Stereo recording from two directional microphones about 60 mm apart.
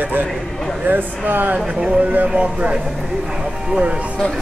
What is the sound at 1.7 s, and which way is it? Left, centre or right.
Speech, centre.